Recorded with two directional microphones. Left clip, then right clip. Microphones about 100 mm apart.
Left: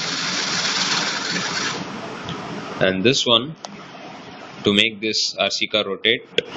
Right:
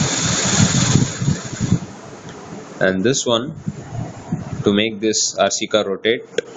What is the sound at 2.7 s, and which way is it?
Speech, 15° right (ahead or behind).